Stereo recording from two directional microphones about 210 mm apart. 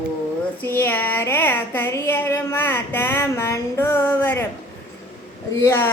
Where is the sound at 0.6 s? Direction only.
10° left (ahead or behind).